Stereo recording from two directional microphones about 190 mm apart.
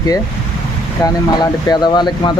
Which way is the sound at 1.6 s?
20° left (ahead or behind).